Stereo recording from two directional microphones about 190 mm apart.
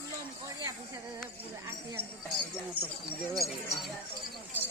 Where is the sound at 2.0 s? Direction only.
30° right (ahead or behind).